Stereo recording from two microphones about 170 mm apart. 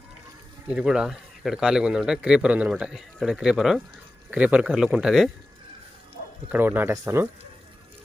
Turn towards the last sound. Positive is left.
turn(degrees=-15)  # may be behind; listen again after turning